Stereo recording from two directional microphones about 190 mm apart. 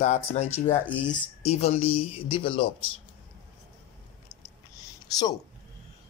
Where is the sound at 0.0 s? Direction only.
35° left (ahead or behind).